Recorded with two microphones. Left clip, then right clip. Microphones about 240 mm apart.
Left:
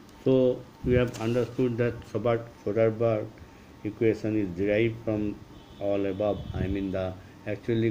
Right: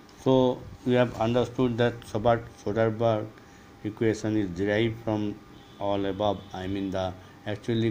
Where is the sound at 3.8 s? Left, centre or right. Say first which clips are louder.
Left 1 dB; right.